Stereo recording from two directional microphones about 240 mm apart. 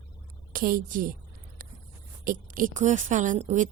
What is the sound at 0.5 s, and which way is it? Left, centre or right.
Speech, right.